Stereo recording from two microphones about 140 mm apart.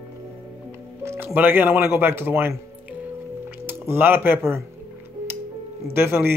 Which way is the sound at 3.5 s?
15° right (ahead or behind).